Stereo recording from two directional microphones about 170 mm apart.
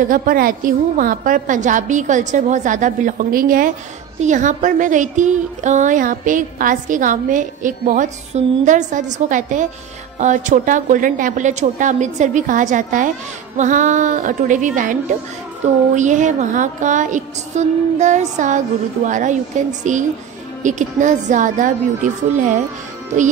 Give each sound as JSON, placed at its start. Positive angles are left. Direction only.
{"t": 0.1, "sound": "a woman's voice", "side_deg": -55}